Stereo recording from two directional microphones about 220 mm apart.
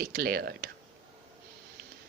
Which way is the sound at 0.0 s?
45° right (ahead or behind).